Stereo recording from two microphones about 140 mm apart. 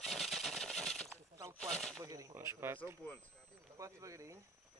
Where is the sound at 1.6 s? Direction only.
5° left (ahead or behind).